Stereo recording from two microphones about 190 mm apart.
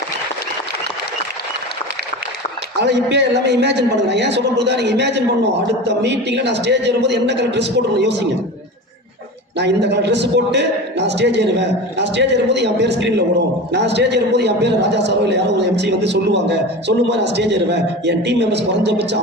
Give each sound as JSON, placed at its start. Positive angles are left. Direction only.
{"t": 2.8, "sound": "a man's voice", "side_deg": -65}
{"t": 9.6, "sound": "a man's voice", "side_deg": -65}